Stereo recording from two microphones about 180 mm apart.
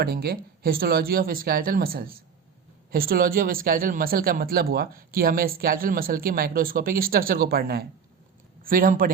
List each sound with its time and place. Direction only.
0.0 s speech: 60° right (ahead or behind)